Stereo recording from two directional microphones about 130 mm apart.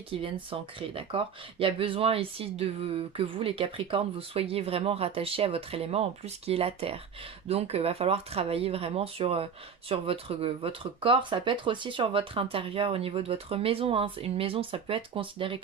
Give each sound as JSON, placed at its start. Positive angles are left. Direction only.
{"t": 0.1, "sound": "speech", "side_deg": -45}